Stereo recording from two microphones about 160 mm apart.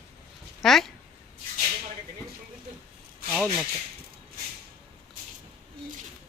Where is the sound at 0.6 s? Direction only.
Centre (ahead or behind).